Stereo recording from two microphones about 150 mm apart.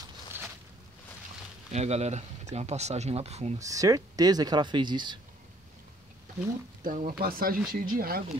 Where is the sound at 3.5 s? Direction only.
20° right (ahead or behind).